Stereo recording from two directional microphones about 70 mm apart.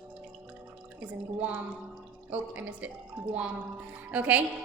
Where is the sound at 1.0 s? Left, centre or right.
Right.